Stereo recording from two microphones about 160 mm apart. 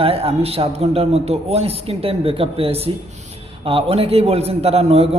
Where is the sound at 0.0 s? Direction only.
35° right (ahead or behind).